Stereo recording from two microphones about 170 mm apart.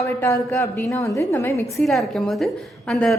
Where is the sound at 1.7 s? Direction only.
Centre (ahead or behind).